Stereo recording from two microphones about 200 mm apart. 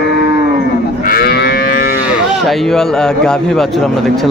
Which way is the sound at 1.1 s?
50° left (ahead or behind).